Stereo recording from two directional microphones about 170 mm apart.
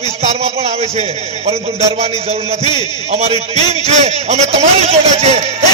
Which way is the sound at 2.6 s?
25° left (ahead or behind).